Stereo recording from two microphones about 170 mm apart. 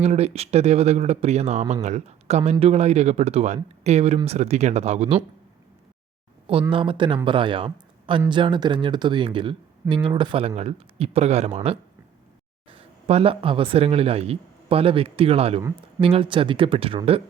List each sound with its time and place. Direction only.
0.0 s speech: 40° right (ahead or behind)
6.5 s speech: 30° right (ahead or behind)